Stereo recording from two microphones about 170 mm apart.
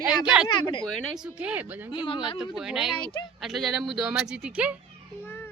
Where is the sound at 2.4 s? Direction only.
5° right (ahead or behind).